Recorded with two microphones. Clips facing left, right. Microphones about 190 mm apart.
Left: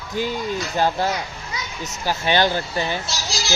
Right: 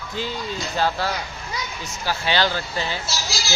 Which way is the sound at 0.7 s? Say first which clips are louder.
Left 2 dB; 15° left (ahead or behind).